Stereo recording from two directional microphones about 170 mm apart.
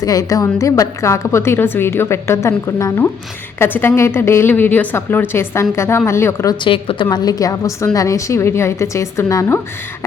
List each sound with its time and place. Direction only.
0.0 s a woman's voice: 20° left (ahead or behind)
6.7 s a woman's voice: 30° left (ahead or behind)